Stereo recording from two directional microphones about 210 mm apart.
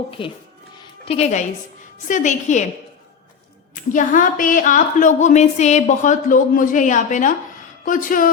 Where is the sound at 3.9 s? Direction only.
40° left (ahead or behind).